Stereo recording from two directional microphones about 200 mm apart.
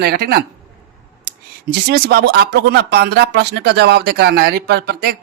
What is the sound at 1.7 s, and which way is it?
Speech, 55° right (ahead or behind).